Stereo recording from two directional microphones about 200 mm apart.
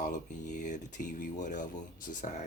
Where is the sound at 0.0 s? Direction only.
40° left (ahead or behind).